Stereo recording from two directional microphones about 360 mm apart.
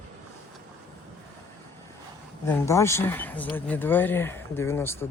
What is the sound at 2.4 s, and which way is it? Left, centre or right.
Speech, centre.